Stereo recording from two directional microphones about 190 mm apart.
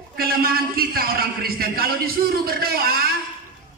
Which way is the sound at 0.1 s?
50° right (ahead or behind).